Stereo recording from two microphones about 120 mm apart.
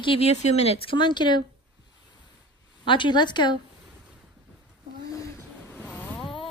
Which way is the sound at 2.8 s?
45° left (ahead or behind).